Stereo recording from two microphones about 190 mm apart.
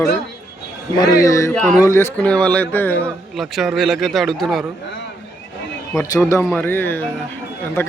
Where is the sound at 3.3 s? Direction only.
Centre (ahead or behind).